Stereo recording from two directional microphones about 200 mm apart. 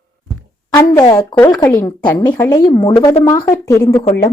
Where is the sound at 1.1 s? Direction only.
20° left (ahead or behind).